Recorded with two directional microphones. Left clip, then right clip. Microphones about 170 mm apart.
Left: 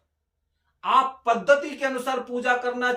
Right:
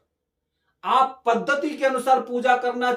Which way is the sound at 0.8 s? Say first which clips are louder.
Right 1 dB; 25° right (ahead or behind).